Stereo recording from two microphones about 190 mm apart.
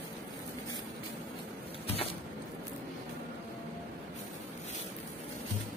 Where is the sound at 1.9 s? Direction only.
30° left (ahead or behind).